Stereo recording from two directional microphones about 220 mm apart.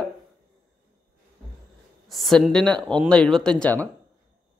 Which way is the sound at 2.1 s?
Centre (ahead or behind).